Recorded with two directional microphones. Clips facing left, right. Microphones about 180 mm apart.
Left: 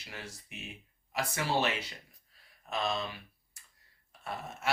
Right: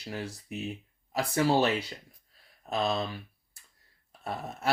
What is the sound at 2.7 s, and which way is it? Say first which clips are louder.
Speech: right 4 dB; 35° right (ahead or behind).